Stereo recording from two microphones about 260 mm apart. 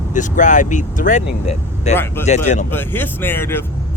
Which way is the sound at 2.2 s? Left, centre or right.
Left.